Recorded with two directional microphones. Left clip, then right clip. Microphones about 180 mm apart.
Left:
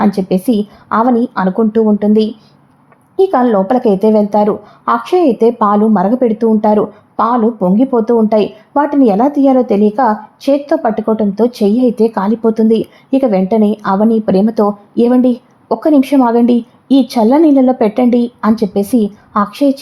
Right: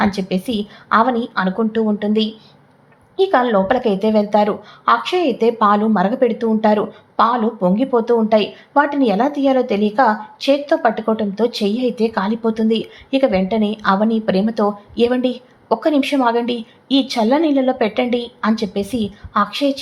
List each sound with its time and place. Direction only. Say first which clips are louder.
0.0 s a woman's voice: left 6 dB; 40° left (ahead or behind)
3.3 s a woman's voice: left 1 dB; 40° left (ahead or behind)